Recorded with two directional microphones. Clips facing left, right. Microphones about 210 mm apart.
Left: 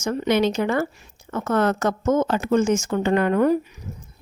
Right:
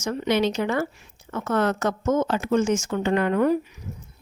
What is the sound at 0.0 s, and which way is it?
Speech, 50° left (ahead or behind).